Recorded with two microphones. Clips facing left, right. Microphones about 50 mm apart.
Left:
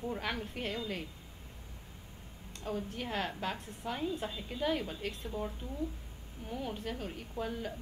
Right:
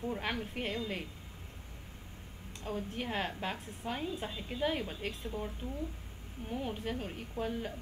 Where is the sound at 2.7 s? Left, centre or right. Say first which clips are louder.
Even; centre.